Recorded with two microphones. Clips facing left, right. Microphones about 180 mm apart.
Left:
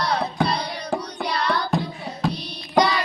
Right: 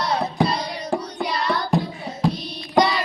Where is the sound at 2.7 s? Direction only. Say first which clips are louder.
Right 1 dB; centre (ahead or behind).